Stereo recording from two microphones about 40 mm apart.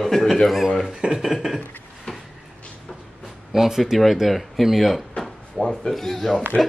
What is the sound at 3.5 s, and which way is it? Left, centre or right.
A man's voice, centre.